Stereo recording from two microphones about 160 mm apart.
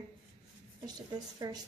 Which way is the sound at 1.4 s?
25° right (ahead or behind).